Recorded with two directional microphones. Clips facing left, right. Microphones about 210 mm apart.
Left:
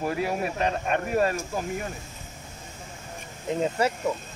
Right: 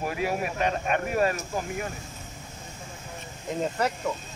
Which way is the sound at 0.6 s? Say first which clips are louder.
Even; 35° left (ahead or behind).